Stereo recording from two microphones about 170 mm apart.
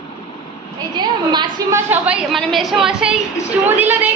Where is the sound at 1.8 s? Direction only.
5° right (ahead or behind).